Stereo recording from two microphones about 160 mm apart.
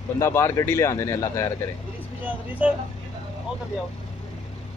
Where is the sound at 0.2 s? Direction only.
15° left (ahead or behind).